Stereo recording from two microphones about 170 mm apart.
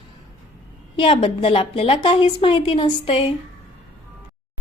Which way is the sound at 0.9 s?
30° left (ahead or behind).